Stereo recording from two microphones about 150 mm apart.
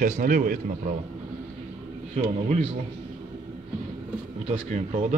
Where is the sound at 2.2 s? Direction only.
60° right (ahead or behind).